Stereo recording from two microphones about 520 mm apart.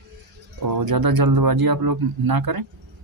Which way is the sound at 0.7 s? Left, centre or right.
Right.